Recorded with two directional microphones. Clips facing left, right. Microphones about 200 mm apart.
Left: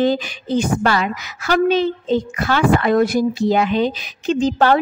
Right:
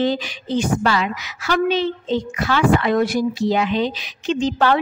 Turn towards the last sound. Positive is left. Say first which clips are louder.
# left 3 dB
turn(degrees=40)  # may be behind; listen again after turning